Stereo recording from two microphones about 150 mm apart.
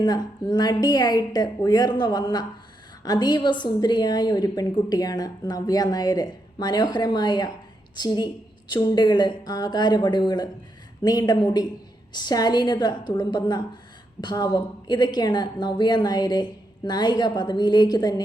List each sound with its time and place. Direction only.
0.0 s a woman's voice: 30° left (ahead or behind)